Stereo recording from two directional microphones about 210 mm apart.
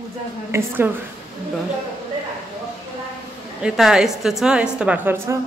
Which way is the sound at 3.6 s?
5° right (ahead or behind).